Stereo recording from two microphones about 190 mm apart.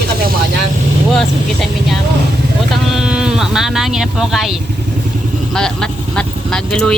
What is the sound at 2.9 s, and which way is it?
Speech, 5° right (ahead or behind).